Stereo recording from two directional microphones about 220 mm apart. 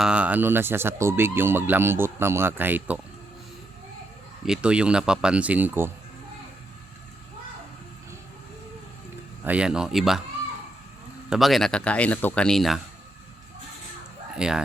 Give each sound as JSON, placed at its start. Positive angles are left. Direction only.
{"t": 0.0, "sound": "speech", "side_deg": -5}
{"t": 4.4, "sound": "speech", "side_deg": -5}
{"t": 9.4, "sound": "speech", "side_deg": -5}
{"t": 11.3, "sound": "speech", "side_deg": 0}
{"t": 14.3, "sound": "speech", "side_deg": -5}